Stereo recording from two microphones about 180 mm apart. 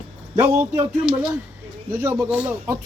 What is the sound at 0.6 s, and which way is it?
Speech, 10° right (ahead or behind).